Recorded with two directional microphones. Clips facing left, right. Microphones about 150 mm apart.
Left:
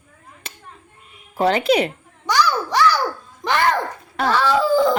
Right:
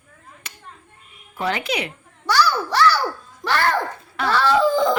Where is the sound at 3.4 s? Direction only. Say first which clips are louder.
Left 1 dB; 20° left (ahead or behind).